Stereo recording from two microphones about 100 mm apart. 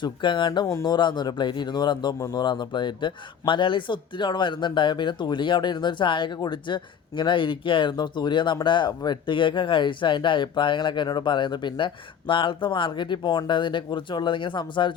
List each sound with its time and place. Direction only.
0.0 s a man's voice: 50° left (ahead or behind)
0.7 s speech: 35° left (ahead or behind)
0.9 s a man's voice: 50° left (ahead or behind)